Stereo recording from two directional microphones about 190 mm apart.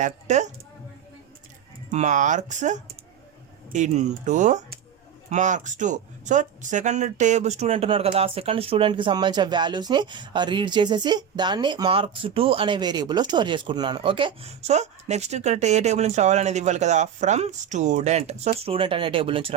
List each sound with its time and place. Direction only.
0.0 s speech: 40° right (ahead or behind)
1.9 s speech: 40° right (ahead or behind)